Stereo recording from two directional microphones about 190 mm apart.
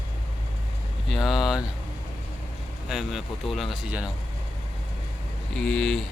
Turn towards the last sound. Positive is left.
turn(degrees=5)  # may be behind; listen again after turning